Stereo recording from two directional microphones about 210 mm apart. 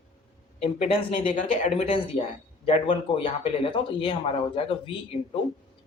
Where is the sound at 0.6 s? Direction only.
30° left (ahead or behind).